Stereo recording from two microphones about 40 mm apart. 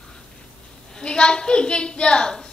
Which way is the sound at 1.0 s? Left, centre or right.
Left.